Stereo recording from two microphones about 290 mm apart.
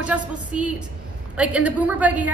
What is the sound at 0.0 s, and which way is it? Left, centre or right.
A woman's voice, centre.